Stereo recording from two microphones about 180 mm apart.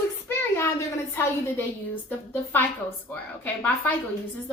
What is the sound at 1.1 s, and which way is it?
A woman's voice, 15° left (ahead or behind).